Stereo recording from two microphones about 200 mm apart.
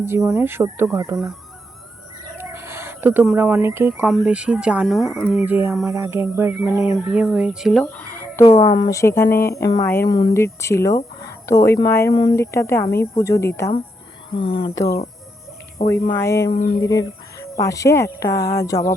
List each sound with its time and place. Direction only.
0.2 s speech: 10° right (ahead or behind)
1.1 s speech: centre (ahead or behind)
2.4 s speech: 10° right (ahead or behind); by 9.3 s 15° left (ahead or behind)
9.3 s speech: 50° left (ahead or behind)
9.6 s speech: 15° left (ahead or behind)
14.3 s speech: 25° left (ahead or behind)
15.9 s speech: 15° left (ahead or behind)